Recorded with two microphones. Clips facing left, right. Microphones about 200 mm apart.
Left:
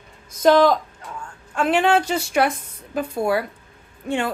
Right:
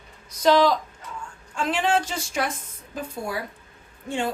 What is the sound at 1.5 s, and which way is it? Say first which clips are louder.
Speech: left 5 dB; 60° left (ahead or behind).